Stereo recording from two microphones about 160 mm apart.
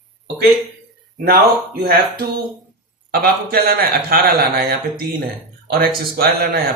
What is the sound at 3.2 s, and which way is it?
A man's voice, 70° right (ahead or behind).